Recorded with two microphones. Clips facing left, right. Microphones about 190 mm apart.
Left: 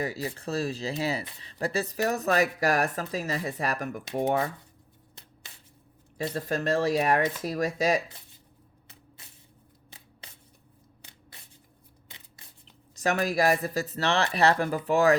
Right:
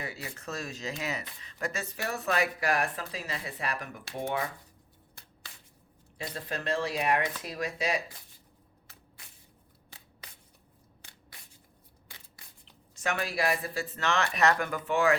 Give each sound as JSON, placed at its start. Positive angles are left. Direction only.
{"t": 0.0, "sound": "speech", "side_deg": 35}
{"t": 6.3, "sound": "speech", "side_deg": 45}
{"t": 12.9, "sound": "speech", "side_deg": 40}